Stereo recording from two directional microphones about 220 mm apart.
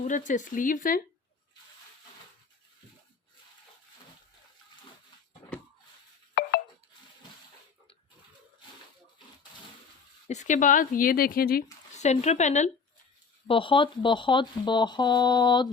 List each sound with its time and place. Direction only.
0.0 s speech: 35° left (ahead or behind)
6.4 s a sound: 45° left (ahead or behind)
10.2 s speech: 35° left (ahead or behind)